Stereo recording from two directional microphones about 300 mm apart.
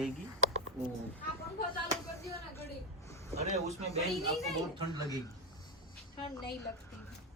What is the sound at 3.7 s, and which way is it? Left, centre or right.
Speech, right.